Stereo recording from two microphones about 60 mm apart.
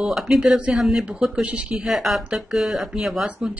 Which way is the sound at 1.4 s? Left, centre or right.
Right.